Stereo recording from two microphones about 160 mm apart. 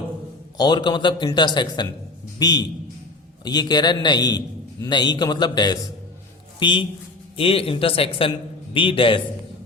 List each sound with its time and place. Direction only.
0.5 s a man's voice: 25° left (ahead or behind)